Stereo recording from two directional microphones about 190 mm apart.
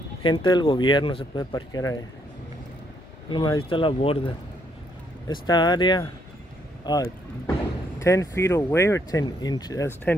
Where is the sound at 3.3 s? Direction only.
25° left (ahead or behind).